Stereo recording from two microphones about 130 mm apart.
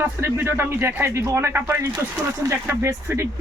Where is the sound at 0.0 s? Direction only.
20° right (ahead or behind).